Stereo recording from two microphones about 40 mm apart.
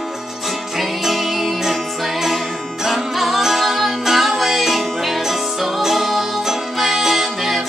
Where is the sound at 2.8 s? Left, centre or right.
Centre.